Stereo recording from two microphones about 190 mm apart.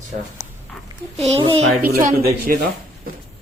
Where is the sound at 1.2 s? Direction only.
30° right (ahead or behind).